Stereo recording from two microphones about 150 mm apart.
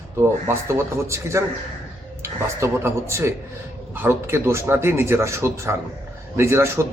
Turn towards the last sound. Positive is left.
turn(degrees=-15)  # may be behind; listen again after turning